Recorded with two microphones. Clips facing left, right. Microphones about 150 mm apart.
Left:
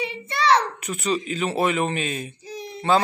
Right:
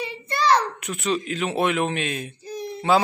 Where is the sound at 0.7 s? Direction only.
Centre (ahead or behind).